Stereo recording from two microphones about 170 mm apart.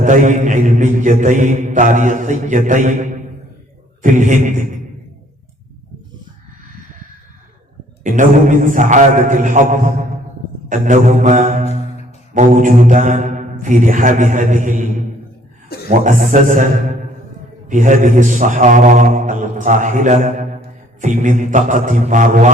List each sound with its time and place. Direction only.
0.0 s mantra: 50° right (ahead or behind)
8.0 s mantra: 50° right (ahead or behind)
17.7 s mantra: 50° right (ahead or behind)